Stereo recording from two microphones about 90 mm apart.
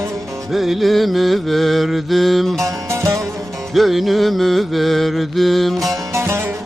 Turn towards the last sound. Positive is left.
turn(degrees=-30)  # may be behind; listen again after turning